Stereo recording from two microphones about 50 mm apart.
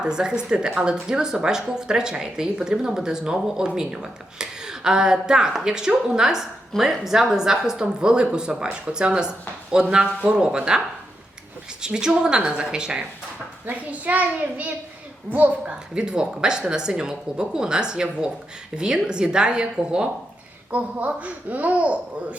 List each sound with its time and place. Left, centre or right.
0.0 s speech: centre
11.8 s speech: centre
13.7 s a child's voice: right
16.0 s speech: centre